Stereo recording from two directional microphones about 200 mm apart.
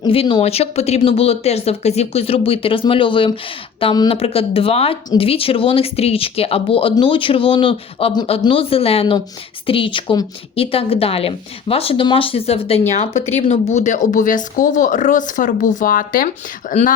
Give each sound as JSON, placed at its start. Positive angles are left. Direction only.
{"t": 0.0, "sound": "speech", "side_deg": 25}